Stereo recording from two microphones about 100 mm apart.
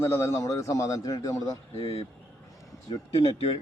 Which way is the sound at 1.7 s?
80° left.